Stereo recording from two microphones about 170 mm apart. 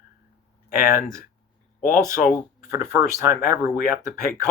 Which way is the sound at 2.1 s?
55° left (ahead or behind).